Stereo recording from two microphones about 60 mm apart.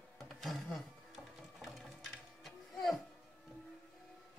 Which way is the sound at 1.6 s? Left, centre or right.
Centre.